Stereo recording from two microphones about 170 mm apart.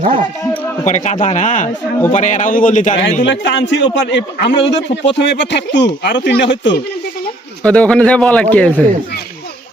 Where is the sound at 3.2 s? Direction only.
90° left.